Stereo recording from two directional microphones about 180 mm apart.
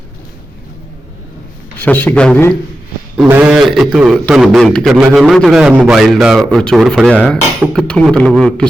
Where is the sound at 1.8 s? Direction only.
10° left (ahead or behind).